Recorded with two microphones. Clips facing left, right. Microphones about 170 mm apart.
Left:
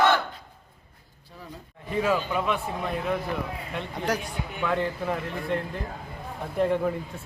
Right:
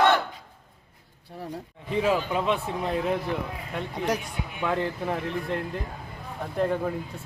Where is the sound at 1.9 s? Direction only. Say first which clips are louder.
Right 1 dB; 20° right (ahead or behind).